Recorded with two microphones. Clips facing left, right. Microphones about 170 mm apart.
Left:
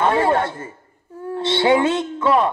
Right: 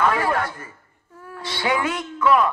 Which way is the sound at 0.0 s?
25° left (ahead or behind).